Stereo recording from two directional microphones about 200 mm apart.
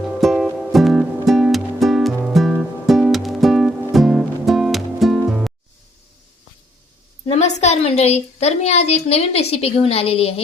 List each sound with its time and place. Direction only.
0.1 s music: centre (ahead or behind)
7.3 s a woman's voice: 35° left (ahead or behind)